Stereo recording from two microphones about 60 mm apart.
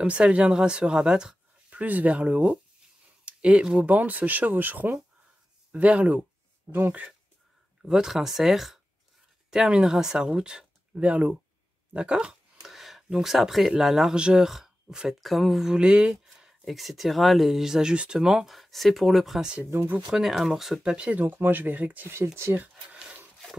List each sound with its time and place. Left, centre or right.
0.0 s speech: right
1.7 s speech: right
7.8 s speech: centre
12.6 s speech: centre
15.7 s speech: centre
18.5 s speech: centre
19.6 s speech: right
20.1 s speech: centre
20.9 s speech: centre
21.2 s speech: right
22.1 s speech: right